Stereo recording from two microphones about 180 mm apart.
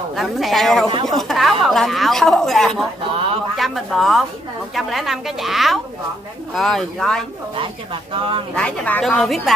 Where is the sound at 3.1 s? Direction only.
30° right (ahead or behind).